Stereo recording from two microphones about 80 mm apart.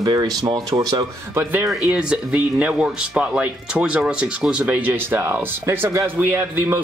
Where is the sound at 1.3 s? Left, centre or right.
Right.